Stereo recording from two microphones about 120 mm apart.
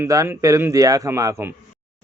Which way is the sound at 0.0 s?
25° right (ahead or behind).